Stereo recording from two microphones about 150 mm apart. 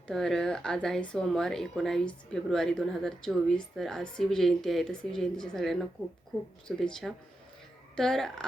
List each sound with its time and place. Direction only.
0.1 s speech: 5° left (ahead or behind)